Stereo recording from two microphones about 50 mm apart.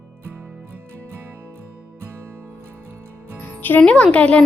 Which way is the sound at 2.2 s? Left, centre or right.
Right.